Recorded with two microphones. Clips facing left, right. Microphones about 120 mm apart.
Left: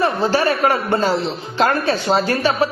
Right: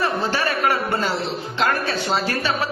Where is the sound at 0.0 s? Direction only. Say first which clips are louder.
Left 5 dB; 35° left (ahead or behind).